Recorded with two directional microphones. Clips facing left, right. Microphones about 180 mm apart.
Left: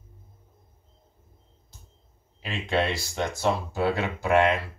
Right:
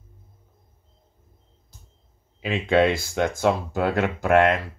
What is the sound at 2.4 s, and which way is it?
Speech, 55° right (ahead or behind).